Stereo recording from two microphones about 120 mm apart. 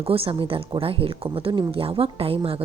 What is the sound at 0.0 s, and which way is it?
Speech, 50° right (ahead or behind).